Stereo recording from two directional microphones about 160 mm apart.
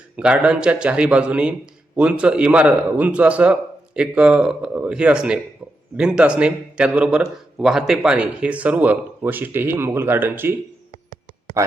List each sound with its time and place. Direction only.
0.2 s a man's voice: 5° right (ahead or behind)
11.6 s speech: 20° right (ahead or behind)